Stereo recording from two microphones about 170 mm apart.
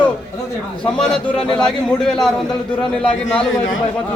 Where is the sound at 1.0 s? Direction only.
5° left (ahead or behind).